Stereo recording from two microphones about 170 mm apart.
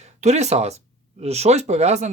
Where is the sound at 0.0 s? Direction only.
40° right (ahead or behind).